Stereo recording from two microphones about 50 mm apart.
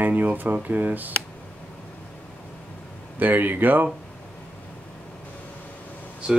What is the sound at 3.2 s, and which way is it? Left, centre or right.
Speech, right.